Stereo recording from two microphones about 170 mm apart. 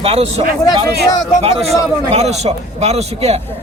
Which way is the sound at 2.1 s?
40° right (ahead or behind).